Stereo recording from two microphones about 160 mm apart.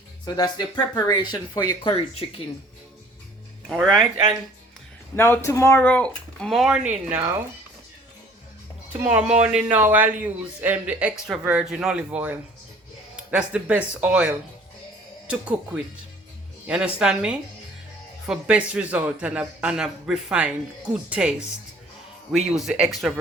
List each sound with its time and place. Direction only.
0.3 s speech: 25° left (ahead or behind)
3.7 s speech: centre (ahead or behind)
5.1 s speech: 15° left (ahead or behind); by 7.4 s 15° right (ahead or behind)
8.9 s a man's voice: 10° right (ahead or behind)